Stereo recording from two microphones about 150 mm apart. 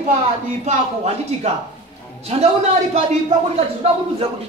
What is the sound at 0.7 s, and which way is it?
Speech, 45° right (ahead or behind).